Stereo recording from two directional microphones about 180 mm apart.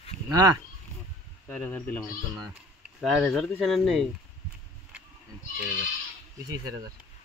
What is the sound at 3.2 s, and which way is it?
Speech, centre (ahead or behind).